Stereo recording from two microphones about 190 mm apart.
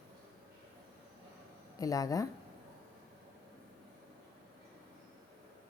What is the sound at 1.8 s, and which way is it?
Speech, 20° left (ahead or behind).